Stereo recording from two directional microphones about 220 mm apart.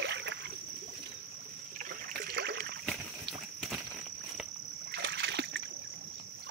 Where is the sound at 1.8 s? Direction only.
40° right (ahead or behind).